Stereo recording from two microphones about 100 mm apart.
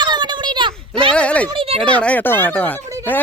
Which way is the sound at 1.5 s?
80° right.